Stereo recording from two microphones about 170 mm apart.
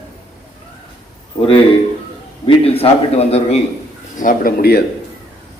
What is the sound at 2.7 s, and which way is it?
Speech, 35° left (ahead or behind).